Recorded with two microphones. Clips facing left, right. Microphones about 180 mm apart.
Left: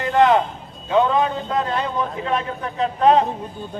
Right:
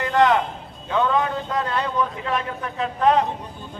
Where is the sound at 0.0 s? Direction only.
30° left (ahead or behind).